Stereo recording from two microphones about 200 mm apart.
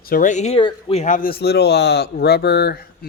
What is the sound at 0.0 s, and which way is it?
Speech, 45° left (ahead or behind).